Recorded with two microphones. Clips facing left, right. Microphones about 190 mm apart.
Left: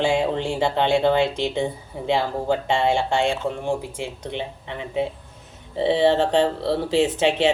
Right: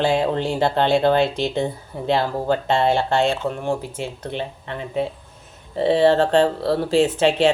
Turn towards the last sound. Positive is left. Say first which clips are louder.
# right 2 dB
turn(degrees=20)  # may be behind; listen again after turning